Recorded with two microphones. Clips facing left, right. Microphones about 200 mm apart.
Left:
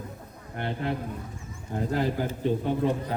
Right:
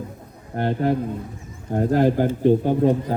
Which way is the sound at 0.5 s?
45° right (ahead or behind).